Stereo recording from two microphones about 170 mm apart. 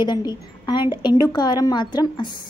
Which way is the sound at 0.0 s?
25° left (ahead or behind).